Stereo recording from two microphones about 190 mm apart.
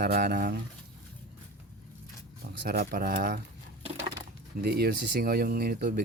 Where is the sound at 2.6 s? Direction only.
55° right (ahead or behind).